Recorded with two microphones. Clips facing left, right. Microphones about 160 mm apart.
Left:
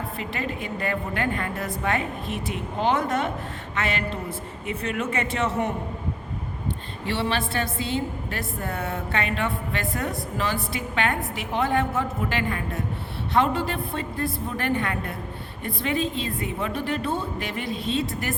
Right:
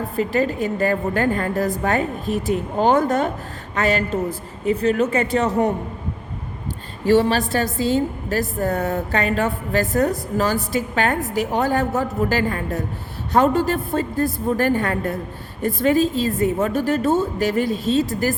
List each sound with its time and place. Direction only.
0.2 s a woman's voice: 40° right (ahead or behind)
7.0 s a woman's voice: 40° right (ahead or behind)